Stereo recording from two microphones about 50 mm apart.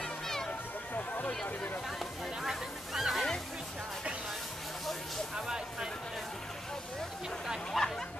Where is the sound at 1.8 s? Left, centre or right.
Centre.